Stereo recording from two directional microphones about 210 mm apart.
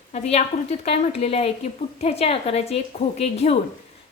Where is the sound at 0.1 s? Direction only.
30° left (ahead or behind).